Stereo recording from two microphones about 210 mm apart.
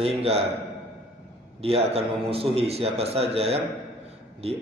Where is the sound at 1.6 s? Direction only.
30° right (ahead or behind).